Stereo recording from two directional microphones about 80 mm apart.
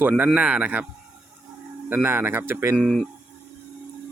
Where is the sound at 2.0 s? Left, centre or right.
Right.